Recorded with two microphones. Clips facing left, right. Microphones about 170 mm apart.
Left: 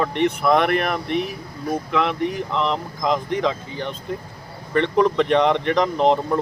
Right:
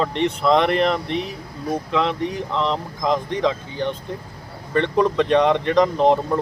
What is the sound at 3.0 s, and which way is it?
Speech, 20° right (ahead or behind).